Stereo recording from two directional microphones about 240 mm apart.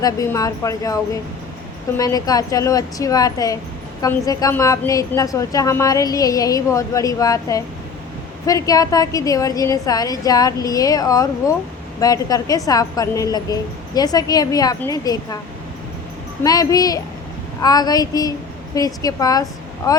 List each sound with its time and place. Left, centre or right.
0.0 s a woman's voice: centre
2.0 s a woman's voice: centre
16.4 s a woman's voice: centre